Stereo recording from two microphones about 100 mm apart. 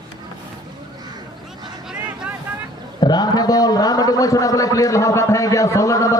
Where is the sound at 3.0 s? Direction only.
45° left (ahead or behind).